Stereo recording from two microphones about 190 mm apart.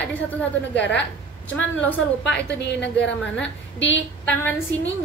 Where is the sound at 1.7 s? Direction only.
10° left (ahead or behind).